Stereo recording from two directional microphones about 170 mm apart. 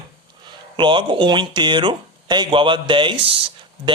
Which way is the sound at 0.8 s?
30° right (ahead or behind).